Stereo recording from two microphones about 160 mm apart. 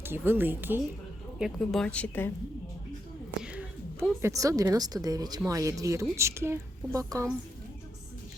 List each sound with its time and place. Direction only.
0.0 s a woman's voice: 15° right (ahead or behind)
1.4 s speech: centre (ahead or behind)
3.4 s a sound: 5° right (ahead or behind)
4.2 s a woman's voice: 20° right (ahead or behind)